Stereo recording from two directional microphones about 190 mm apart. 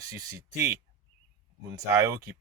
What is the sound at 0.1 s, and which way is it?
Speech, 15° right (ahead or behind).